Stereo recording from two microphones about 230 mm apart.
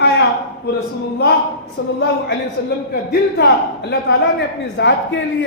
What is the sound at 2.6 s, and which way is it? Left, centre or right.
A man's voice, left.